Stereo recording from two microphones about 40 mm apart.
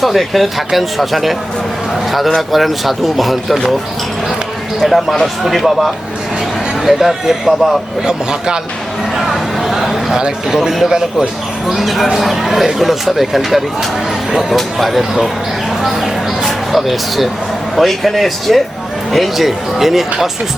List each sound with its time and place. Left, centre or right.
0.0 s speech: centre
2.5 s speech: centre
4.8 s speech: centre
8.0 s speech: centre
9.1 s a sound: centre
10.2 s speech: centre
11.7 s speech: centre
15.8 s a sound: centre
17.7 s speech: centre